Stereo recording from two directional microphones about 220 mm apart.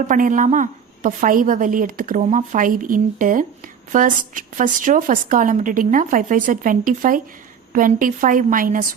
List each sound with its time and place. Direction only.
0.1 s a woman's voice: 35° right (ahead or behind)